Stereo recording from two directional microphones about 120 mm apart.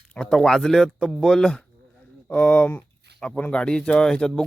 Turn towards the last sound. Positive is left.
turn(degrees=5)  # may be behind; listen again after turning